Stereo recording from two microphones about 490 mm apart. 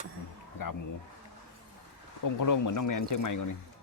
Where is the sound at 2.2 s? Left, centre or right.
Left.